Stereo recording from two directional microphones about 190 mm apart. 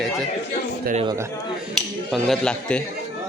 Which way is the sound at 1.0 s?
20° right (ahead or behind).